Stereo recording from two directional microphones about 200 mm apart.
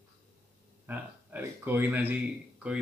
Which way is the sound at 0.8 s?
10° right (ahead or behind).